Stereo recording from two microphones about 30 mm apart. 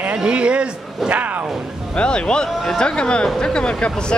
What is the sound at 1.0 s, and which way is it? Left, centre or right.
Speech, right.